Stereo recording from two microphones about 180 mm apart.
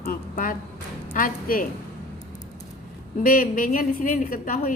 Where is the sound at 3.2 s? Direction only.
50° left (ahead or behind).